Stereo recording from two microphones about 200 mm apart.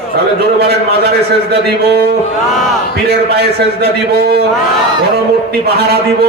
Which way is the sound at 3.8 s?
55° right (ahead or behind).